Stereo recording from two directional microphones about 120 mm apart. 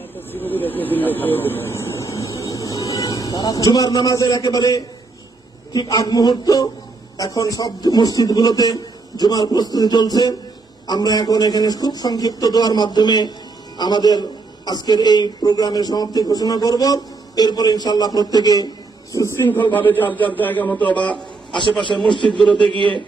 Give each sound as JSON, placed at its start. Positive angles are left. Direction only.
{"t": 0.3, "sound": "vehicle", "side_deg": 15}
{"t": 5.7, "sound": "a man's voice", "side_deg": 35}
{"t": 21.5, "sound": "speech", "side_deg": 40}
{"t": 22.3, "sound": "a man's voice", "side_deg": 10}